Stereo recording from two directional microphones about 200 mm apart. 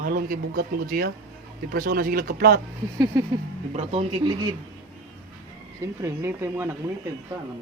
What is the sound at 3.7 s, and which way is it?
Speech, 30° right (ahead or behind).